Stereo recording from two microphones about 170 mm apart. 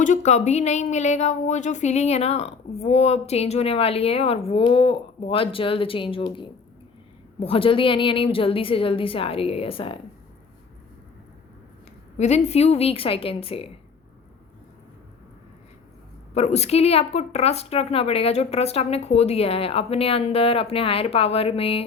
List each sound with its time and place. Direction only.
0.0 s a woman's voice: 45° left (ahead or behind)
12.1 s a woman's voice: 40° left (ahead or behind)
16.3 s a woman's voice: 40° left (ahead or behind)